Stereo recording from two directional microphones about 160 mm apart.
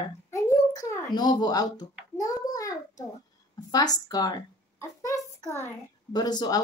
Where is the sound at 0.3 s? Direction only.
20° left (ahead or behind).